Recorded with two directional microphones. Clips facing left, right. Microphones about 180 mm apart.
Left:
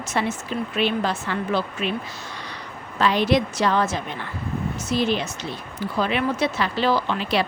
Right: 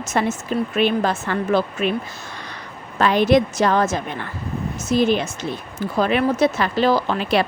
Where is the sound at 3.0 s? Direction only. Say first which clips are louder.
Right 4 dB; 50° right (ahead or behind).